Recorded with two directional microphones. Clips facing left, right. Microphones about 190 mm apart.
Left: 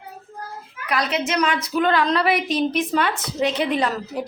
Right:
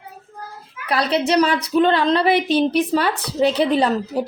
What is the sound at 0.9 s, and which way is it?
A woman's voice, 30° right (ahead or behind).